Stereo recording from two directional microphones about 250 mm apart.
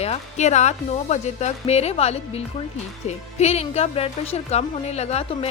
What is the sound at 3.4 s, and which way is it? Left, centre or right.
A woman's voice, left.